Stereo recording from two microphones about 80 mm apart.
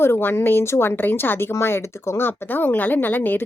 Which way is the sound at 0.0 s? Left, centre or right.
Left.